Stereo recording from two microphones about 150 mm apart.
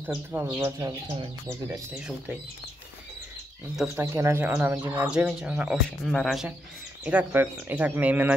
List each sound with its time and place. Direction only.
0.0 s speech: 15° right (ahead or behind)
2.0 s speech: 5° right (ahead or behind)
3.7 s speech: 5° right (ahead or behind)
4.0 s speech: 20° right (ahead or behind)
5.9 s speech: 5° left (ahead or behind)